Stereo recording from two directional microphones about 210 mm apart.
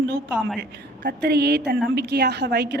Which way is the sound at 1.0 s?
50° right (ahead or behind).